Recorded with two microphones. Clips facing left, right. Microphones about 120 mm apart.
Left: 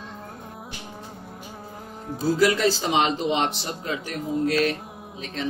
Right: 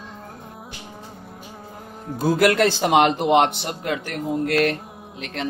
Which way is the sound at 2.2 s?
60° right (ahead or behind).